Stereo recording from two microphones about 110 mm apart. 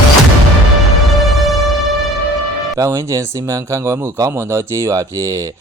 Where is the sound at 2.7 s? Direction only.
30° right (ahead or behind).